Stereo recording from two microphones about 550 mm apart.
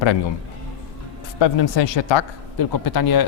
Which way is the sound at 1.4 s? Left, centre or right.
Left.